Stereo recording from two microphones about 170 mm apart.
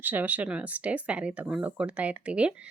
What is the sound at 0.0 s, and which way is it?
Speech, 10° right (ahead or behind).